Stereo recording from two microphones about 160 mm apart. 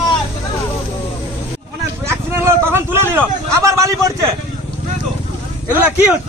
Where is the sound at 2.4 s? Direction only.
15° right (ahead or behind).